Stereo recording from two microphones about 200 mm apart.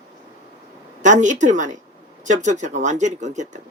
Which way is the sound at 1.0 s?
40° right (ahead or behind).